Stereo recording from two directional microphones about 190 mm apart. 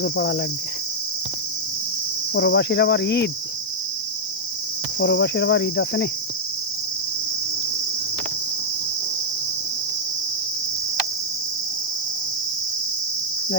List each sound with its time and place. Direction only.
0.0 s cricket: 70° left (ahead or behind)
2.3 s cricket: 70° left (ahead or behind)
4.9 s cricket: 65° left (ahead or behind)